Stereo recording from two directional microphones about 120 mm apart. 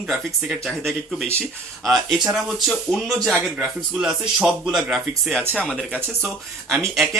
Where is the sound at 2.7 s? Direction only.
Centre (ahead or behind).